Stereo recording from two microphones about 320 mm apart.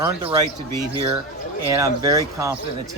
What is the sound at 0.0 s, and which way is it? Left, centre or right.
Speech, centre.